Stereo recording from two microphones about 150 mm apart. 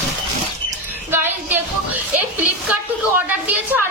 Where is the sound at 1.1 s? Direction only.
15° right (ahead or behind).